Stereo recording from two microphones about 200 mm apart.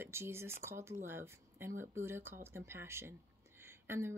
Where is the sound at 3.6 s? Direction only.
10° right (ahead or behind).